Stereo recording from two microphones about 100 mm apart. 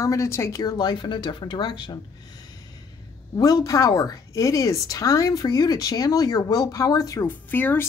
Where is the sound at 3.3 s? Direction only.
40° left (ahead or behind).